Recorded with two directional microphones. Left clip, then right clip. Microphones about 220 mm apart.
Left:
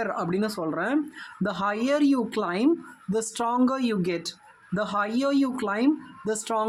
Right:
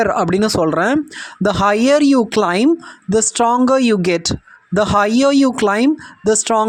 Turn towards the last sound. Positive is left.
turn(degrees=-35)  # may be behind; listen again after turning